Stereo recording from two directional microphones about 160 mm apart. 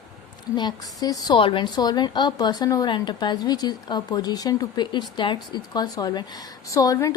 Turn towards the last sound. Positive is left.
turn(degrees=20)  # may be behind; listen again after turning